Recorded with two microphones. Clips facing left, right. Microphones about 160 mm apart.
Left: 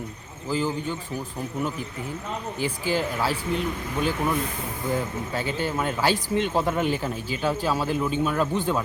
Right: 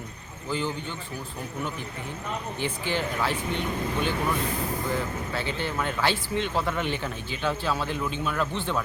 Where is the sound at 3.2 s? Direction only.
35° left (ahead or behind).